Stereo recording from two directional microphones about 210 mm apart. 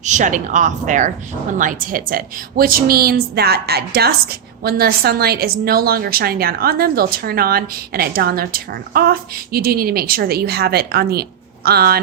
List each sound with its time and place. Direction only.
0.0 s a woman's voice: 35° right (ahead or behind)